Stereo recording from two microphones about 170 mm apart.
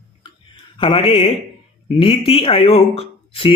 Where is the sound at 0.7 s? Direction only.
35° left (ahead or behind).